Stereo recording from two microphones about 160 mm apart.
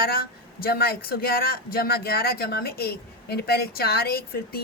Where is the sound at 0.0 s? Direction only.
70° left (ahead or behind).